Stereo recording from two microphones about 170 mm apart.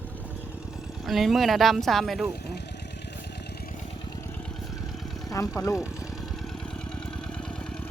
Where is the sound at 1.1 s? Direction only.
Centre (ahead or behind).